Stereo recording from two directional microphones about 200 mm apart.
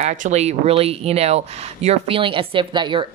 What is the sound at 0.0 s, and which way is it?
Speech, 35° right (ahead or behind).